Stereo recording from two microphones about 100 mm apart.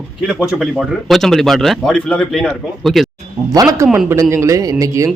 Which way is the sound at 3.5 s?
40° right (ahead or behind).